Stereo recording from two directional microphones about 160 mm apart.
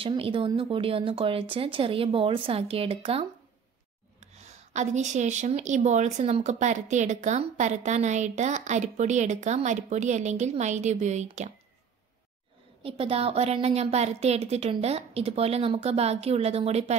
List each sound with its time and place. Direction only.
0.0 s a woman's voice: 35° right (ahead or behind)
12.8 s a woman's voice: 35° right (ahead or behind)